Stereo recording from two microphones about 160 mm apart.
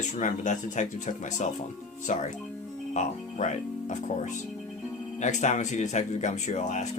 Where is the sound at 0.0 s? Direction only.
50° left (ahead or behind).